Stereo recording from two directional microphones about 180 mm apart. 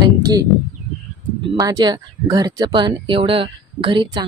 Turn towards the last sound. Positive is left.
turn(degrees=-25)  # may be behind; listen again after turning